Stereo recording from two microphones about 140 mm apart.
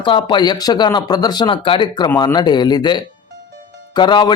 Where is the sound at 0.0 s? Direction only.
35° left (ahead or behind).